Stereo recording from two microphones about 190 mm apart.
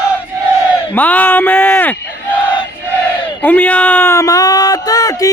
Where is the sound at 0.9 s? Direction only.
10° left (ahead or behind).